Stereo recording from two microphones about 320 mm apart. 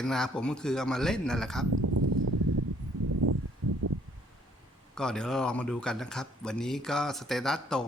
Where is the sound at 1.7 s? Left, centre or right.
Right.